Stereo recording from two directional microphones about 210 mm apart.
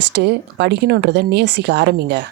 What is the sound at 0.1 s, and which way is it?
Speech, 50° right (ahead or behind).